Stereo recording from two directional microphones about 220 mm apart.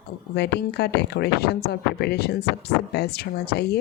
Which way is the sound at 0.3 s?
50° left (ahead or behind).